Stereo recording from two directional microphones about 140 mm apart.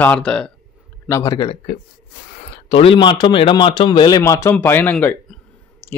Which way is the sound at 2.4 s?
45° left (ahead or behind).